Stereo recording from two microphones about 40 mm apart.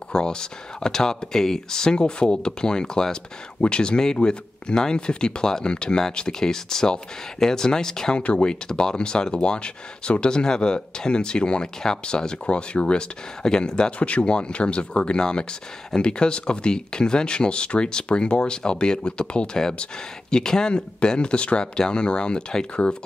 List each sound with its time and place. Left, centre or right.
0.1 s speech: left
8.2 s speech: left
8.6 s speech: centre
13.9 s speech: left